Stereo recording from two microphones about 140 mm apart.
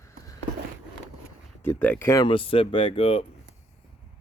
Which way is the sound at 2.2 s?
40° left (ahead or behind).